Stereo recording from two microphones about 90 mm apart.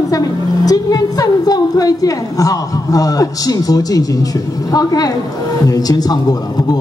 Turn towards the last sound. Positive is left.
turn(degrees=45)  # may be behind; listen again after turning